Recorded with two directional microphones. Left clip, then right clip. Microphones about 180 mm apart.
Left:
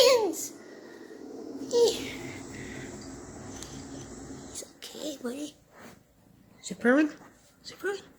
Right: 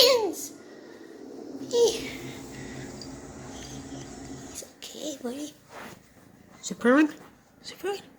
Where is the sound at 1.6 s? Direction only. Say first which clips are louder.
Right 1 dB; 10° right (ahead or behind).